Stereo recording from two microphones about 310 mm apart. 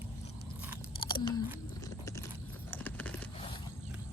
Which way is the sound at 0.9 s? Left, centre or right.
Centre.